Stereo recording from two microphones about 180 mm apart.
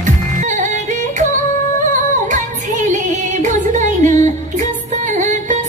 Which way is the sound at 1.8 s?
45° right (ahead or behind).